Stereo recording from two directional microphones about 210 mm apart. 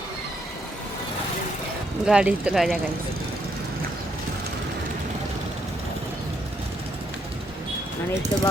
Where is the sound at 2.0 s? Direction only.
5° right (ahead or behind).